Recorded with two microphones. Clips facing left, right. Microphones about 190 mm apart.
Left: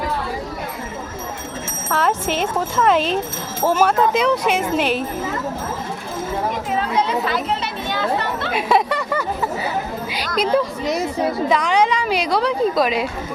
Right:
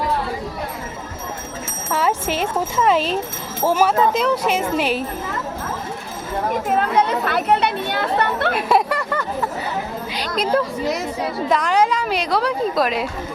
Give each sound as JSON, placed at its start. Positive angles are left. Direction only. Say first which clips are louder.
{"t": 1.9, "sound": "a woman's voice", "louder": "even", "side_deg": -10}
{"t": 6.7, "sound": "children playing", "louder": "right 3 dB", "side_deg": -55}
{"t": 8.5, "sound": "a woman's voice", "louder": "left 3 dB", "side_deg": 0}